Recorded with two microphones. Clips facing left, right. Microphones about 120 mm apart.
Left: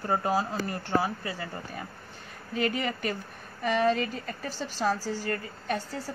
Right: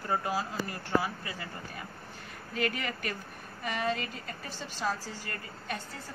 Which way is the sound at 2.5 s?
30° left (ahead or behind).